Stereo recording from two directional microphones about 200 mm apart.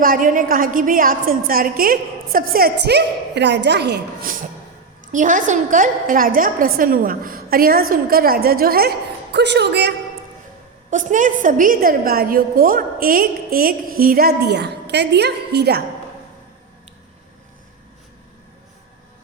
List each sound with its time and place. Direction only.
0.0 s a woman's voice: 45° right (ahead or behind)
5.1 s a woman's voice: 40° right (ahead or behind); by 9.9 s 55° right (ahead or behind)
10.9 s a woman's voice: 40° right (ahead or behind)